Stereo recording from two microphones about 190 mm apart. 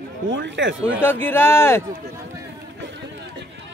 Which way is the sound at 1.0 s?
10° left (ahead or behind).